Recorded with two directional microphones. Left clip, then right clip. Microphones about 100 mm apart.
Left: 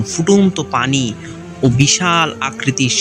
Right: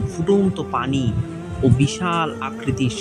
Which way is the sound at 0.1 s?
15° left (ahead or behind).